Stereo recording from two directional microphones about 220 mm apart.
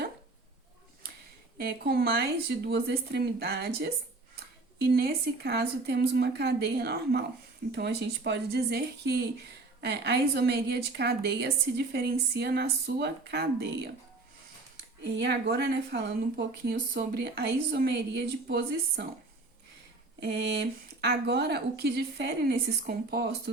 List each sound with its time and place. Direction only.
1.5 s a woman's voice: 45° right (ahead or behind)
4.9 s a woman's voice: 45° right (ahead or behind)
15.0 s a woman's voice: 50° right (ahead or behind)
20.1 s a woman's voice: 50° right (ahead or behind)